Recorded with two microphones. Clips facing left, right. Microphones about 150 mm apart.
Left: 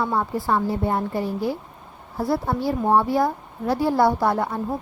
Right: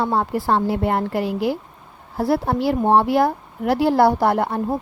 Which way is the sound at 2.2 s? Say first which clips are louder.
Right 4 dB; 75° right (ahead or behind).